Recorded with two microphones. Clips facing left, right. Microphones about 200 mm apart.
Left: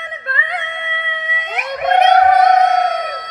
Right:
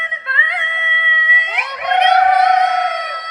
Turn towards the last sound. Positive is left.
turn(degrees=45)  # may be behind; listen again after turning